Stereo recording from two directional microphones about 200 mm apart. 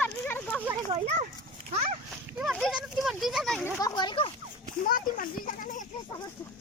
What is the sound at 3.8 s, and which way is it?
Splash, 20° left (ahead or behind).